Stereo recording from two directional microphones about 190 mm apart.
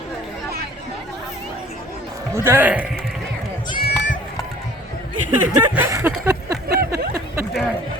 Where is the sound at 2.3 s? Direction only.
15° right (ahead or behind).